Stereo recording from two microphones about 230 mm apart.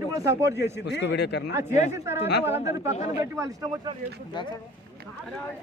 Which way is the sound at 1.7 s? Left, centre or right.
Left.